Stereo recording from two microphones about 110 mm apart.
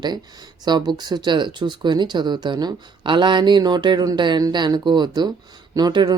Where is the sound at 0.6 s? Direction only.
40° right (ahead or behind).